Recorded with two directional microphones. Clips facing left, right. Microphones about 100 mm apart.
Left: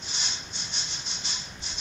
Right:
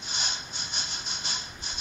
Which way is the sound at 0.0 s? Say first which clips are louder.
Right 3 dB; 45° right (ahead or behind).